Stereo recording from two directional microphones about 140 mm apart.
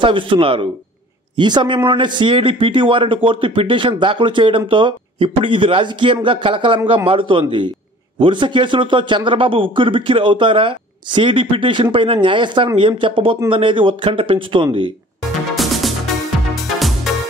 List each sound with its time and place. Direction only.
0.0 s a man's voice: 40° right (ahead or behind)
15.5 s music: centre (ahead or behind)